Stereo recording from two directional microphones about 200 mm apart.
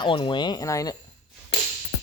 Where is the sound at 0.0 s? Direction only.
25° left (ahead or behind).